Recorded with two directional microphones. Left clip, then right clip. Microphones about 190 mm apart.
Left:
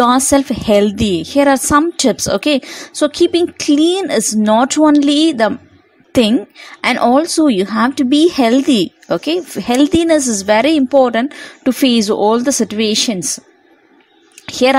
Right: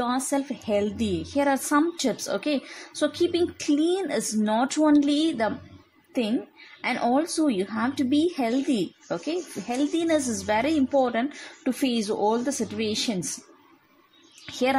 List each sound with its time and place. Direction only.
0.0 s a woman's voice: 45° left (ahead or behind)
14.4 s speech: 35° left (ahead or behind)